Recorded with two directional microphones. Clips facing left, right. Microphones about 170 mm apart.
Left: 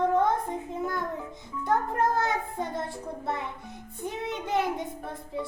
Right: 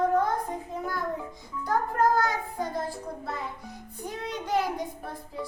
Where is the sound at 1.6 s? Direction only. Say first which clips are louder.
Right 1 dB; 25° left (ahead or behind).